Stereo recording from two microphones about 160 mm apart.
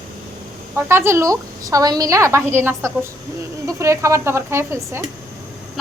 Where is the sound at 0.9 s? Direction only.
15° right (ahead or behind).